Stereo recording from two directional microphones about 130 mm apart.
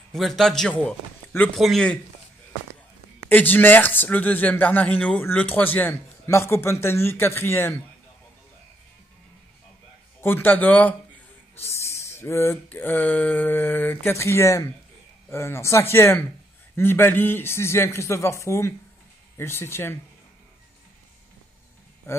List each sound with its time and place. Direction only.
0.1 s a man's voice: centre (ahead or behind)
3.3 s speech: 15° left (ahead or behind)
10.2 s a man's voice: 15° left (ahead or behind)